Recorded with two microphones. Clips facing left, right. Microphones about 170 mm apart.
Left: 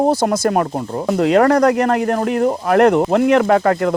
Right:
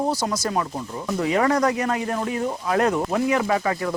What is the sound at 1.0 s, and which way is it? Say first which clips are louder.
Speech: left 8 dB; 70° left (ahead or behind).